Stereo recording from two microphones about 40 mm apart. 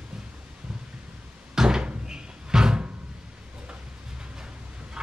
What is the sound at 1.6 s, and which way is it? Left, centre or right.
Cupboard open or close, centre.